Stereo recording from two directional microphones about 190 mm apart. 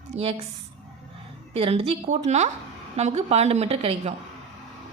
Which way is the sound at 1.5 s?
30° right (ahead or behind).